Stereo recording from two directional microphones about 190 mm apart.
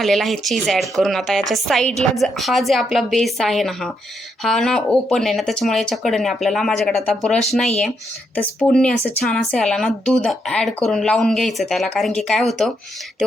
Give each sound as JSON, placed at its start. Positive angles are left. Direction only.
{"t": 0.0, "sound": "a woman's voice", "side_deg": 0}